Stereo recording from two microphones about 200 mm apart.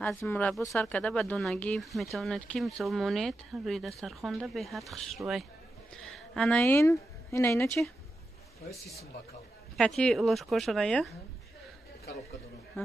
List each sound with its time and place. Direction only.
0.2 s a woman's voice: 10° left (ahead or behind)
9.8 s speech: 5° left (ahead or behind)